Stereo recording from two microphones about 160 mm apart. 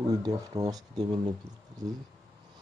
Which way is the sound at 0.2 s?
20° right (ahead or behind).